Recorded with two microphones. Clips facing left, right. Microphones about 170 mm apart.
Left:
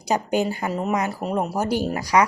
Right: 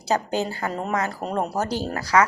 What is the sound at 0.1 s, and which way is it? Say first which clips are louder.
Speech: left 2 dB; 15° left (ahead or behind).